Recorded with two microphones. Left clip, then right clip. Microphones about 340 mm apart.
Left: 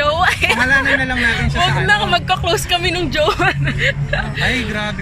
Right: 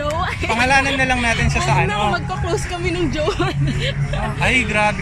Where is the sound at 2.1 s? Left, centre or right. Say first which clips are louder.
Left 5 dB; left.